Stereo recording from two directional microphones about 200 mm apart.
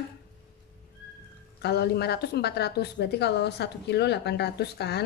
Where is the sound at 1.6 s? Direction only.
55° left (ahead or behind).